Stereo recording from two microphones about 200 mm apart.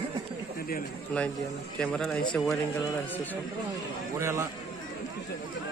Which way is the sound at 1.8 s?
5° left (ahead or behind).